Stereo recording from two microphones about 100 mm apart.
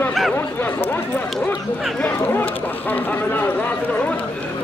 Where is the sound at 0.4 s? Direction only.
20° left (ahead or behind).